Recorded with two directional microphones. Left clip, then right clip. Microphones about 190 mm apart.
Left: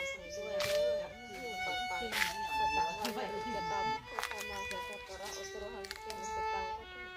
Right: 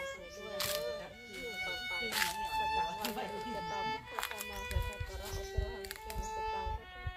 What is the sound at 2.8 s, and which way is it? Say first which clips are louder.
Music: left 1 dB; 40° right (ahead or behind).